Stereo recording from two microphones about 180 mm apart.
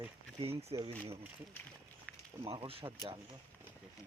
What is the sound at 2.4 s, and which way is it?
Speech, 30° right (ahead or behind).